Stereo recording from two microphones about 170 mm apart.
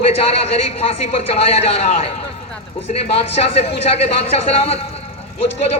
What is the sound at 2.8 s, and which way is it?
Speech, 35° left (ahead or behind).